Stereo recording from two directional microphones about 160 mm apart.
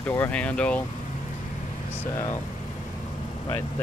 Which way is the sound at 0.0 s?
10° left (ahead or behind).